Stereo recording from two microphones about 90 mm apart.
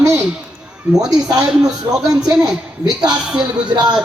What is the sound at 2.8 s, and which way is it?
Speech, 50° right (ahead or behind).